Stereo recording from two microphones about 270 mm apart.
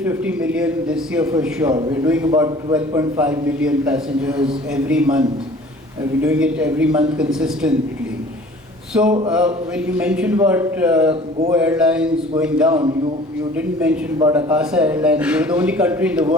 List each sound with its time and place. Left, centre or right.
0.0 s a man's voice: centre
6.2 s a man's voice: centre
8.9 s a man's voice: centre
11.1 s speech: right
11.5 s a man's voice: centre
14.5 s a man's voice: centre